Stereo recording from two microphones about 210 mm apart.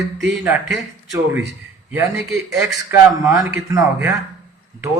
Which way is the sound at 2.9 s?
10° right (ahead or behind).